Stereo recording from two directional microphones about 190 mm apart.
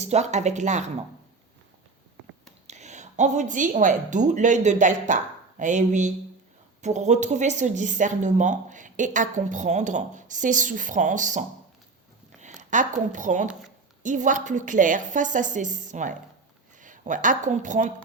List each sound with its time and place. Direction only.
0.0 s speech: 35° right (ahead or behind)
2.6 s a woman's voice: 40° right (ahead or behind)
12.5 s speech: 40° right (ahead or behind)